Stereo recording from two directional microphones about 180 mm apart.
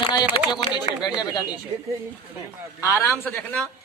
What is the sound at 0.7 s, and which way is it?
Speech, 25° left (ahead or behind).